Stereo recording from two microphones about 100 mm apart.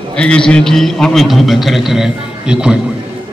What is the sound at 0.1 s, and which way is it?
A man's voice, 10° left (ahead or behind).